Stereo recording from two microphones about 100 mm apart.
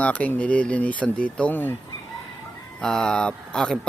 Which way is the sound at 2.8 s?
5° left (ahead or behind).